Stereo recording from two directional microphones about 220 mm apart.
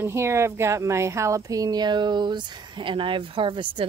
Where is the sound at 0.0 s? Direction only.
10° right (ahead or behind).